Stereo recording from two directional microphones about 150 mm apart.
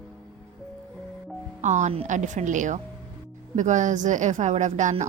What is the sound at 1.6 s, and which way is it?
A woman's voice, 55° right (ahead or behind).